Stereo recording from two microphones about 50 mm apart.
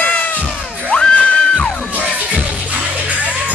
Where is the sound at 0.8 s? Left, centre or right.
Centre.